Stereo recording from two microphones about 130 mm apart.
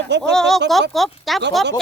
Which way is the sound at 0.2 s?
5° left (ahead or behind).